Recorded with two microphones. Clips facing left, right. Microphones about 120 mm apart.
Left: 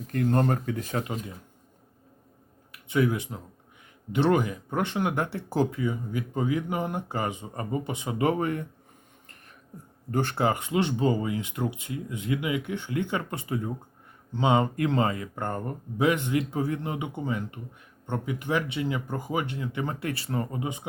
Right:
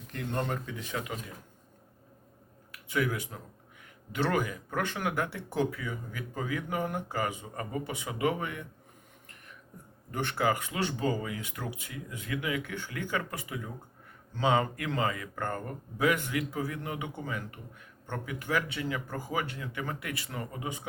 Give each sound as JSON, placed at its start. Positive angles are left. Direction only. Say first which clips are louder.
{"t": 0.1, "sound": "speech", "louder": "left 9 dB", "side_deg": 45}
{"t": 2.8, "sound": "speech", "louder": "left 6 dB", "side_deg": 25}
{"t": 10.1, "sound": "speech", "louder": "left 4 dB", "side_deg": 35}